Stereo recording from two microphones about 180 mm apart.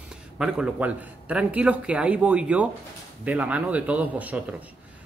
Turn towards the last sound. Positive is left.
turn(degrees=-10)  # may be behind; listen again after turning